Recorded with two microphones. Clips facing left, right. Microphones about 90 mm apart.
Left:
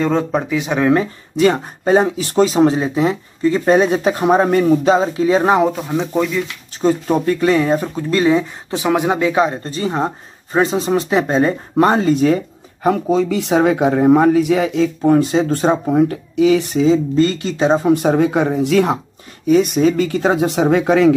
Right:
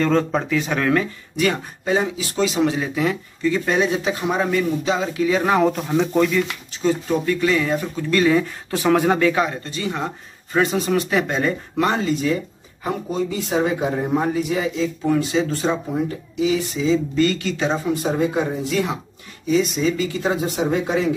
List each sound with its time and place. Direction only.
0.0 s speech: 10° left (ahead or behind)
1.4 s speech: 35° left (ahead or behind)
5.7 s speech: 5° left (ahead or behind)
6.8 s speech: 40° left (ahead or behind); by 9.6 s 20° left (ahead or behind)
9.6 s speech: 35° left (ahead or behind); by 12.4 s 50° left (ahead or behind)
12.8 s speech: 85° left; by 14.9 s 65° left (ahead or behind)
15.0 s speech: 40° left (ahead or behind); by 16.8 s 65° left (ahead or behind)
16.8 s speech: 35° left (ahead or behind)
17.8 s speech: 65° left (ahead or behind)
19.4 s speech: 55° left (ahead or behind); by 21.1 s 80° left